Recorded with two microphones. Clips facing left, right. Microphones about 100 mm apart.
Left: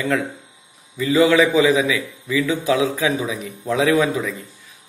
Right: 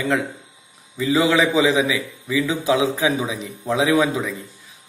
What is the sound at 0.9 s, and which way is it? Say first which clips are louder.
A man's voice: left 3 dB; 20° right (ahead or behind).